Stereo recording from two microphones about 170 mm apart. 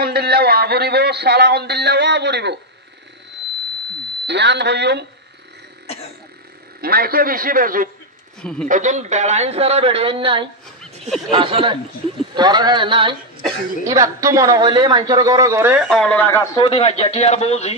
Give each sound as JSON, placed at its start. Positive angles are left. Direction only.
{"t": 0.0, "sound": "a man's voice", "side_deg": -70}
{"t": 4.3, "sound": "speech", "side_deg": -90}
{"t": 6.8, "sound": "a man's voice", "side_deg": -65}
{"t": 8.4, "sound": "speech", "side_deg": 5}
{"t": 8.6, "sound": "a man's voice", "side_deg": -45}
{"t": 13.8, "sound": "a man's voice", "side_deg": -20}
{"t": 15.9, "sound": "speech", "side_deg": 5}
{"t": 16.5, "sound": "speech", "side_deg": 35}